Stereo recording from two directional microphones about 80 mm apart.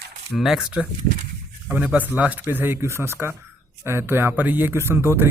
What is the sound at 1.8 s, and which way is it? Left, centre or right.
Speech, centre.